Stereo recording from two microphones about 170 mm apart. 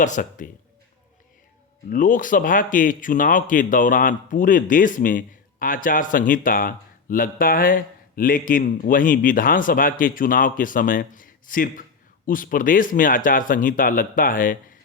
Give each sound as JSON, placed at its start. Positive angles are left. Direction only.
{"t": 0.0, "sound": "speech", "side_deg": 50}
{"t": 1.9, "sound": "speech", "side_deg": 50}